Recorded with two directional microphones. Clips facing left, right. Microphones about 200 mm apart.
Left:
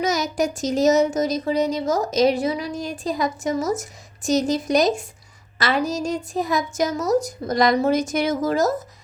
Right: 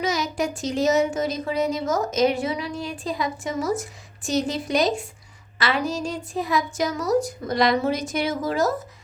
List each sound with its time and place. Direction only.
0.0 s a woman's voice: 45° left (ahead or behind)